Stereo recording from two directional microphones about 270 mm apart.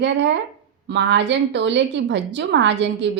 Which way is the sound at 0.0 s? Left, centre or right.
Right.